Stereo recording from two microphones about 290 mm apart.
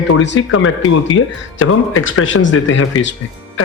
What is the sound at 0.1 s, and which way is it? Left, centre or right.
Speech, left.